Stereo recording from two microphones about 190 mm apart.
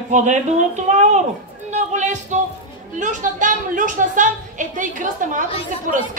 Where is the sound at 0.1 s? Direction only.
40° right (ahead or behind).